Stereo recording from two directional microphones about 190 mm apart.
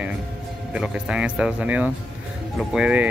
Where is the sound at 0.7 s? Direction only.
5° right (ahead or behind).